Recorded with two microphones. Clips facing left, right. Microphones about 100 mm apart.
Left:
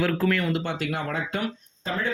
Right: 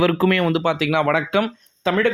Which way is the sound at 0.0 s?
85° right.